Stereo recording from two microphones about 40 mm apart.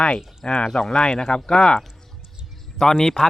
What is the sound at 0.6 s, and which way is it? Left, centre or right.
Speech, centre.